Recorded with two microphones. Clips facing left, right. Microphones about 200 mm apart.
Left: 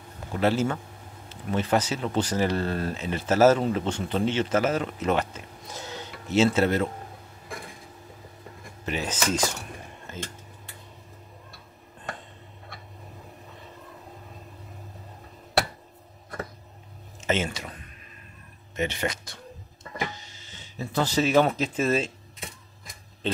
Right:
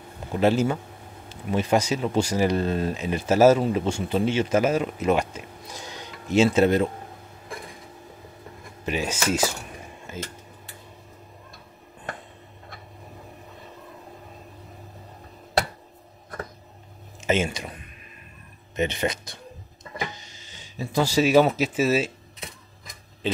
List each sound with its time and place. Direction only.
0.3 s speech: 15° right (ahead or behind)
8.8 s speech: 15° right (ahead or behind)
17.3 s speech: 15° right (ahead or behind)
18.8 s speech: 20° right (ahead or behind)
20.4 s speech: 15° right (ahead or behind)